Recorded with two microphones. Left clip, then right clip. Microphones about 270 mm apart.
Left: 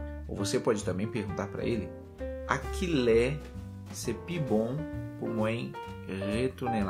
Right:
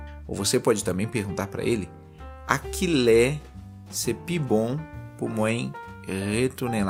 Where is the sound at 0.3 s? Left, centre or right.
Right.